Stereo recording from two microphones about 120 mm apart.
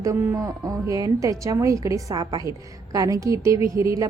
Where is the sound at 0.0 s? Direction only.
25° right (ahead or behind).